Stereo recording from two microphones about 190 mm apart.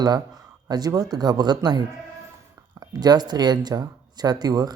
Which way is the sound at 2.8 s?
20° right (ahead or behind).